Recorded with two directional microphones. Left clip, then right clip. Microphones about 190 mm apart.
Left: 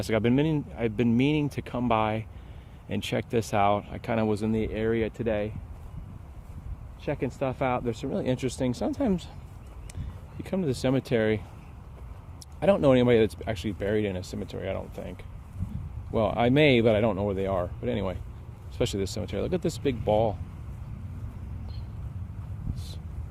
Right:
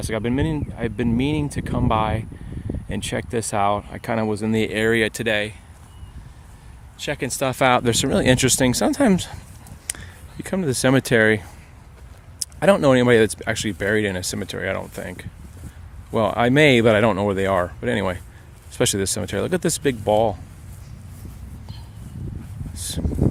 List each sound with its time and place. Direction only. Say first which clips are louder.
0.0 s speech: right 1 dB; 10° right (ahead or behind); by 4.5 s 25° right (ahead or behind)
4.5 s speech: right 8 dB; 55° right (ahead or behind)
5.1 s speech: right 7 dB; 30° right (ahead or behind)
7.3 s speech: right 13 dB; 55° right (ahead or behind); by 9.3 s 35° right (ahead or behind)
9.9 s a sound: right 15 dB; 40° right (ahead or behind)
10.4 s speech: right 7 dB; 30° right (ahead or behind)